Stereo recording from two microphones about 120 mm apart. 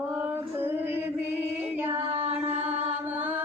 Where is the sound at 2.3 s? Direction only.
15° right (ahead or behind).